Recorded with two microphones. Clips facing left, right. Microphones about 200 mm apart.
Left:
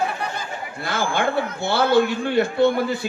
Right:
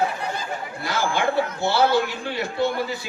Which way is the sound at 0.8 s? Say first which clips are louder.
Left 1 dB; 55° left (ahead or behind).